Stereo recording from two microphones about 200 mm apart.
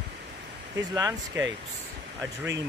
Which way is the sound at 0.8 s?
15° right (ahead or behind).